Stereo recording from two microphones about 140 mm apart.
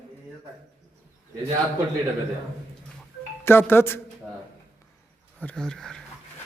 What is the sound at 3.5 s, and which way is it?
Speech, 15° left (ahead or behind).